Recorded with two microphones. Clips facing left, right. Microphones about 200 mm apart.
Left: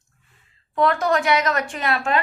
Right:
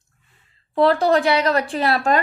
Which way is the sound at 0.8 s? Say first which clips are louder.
Right 4 dB; 30° right (ahead or behind).